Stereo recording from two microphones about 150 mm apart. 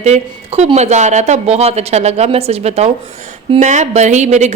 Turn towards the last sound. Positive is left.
turn(degrees=-50)  # may be behind; listen again after turning